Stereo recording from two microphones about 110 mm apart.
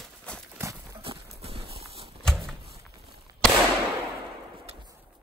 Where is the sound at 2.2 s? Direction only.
5° left (ahead or behind).